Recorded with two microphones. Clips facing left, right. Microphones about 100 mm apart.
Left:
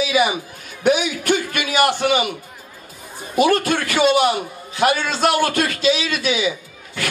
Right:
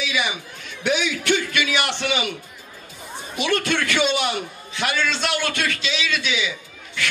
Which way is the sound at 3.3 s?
45° left (ahead or behind).